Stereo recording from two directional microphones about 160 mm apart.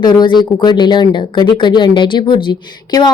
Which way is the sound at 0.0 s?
25° left (ahead or behind).